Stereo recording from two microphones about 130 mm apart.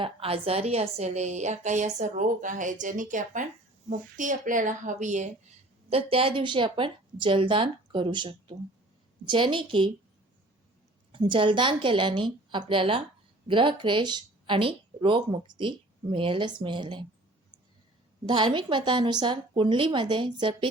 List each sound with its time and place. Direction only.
0.0 s a woman's voice: 45° right (ahead or behind); by 5.3 s 65° right (ahead or behind)
5.9 s speech: 45° right (ahead or behind)
11.1 s speech: 40° right (ahead or behind)
18.3 s speech: 35° right (ahead or behind)